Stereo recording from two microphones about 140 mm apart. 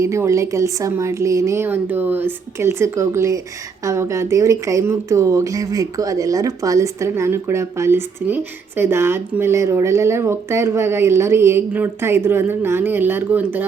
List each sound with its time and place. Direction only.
0.0 s speech: 20° right (ahead or behind)